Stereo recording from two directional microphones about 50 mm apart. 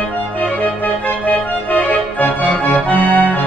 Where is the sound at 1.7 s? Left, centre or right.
Left.